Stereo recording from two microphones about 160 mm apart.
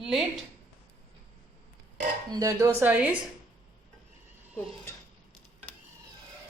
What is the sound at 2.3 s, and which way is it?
Speech, 20° right (ahead or behind).